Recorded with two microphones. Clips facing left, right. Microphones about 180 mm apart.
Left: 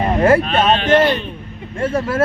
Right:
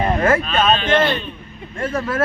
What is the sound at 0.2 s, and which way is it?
Speech, 30° left (ahead or behind).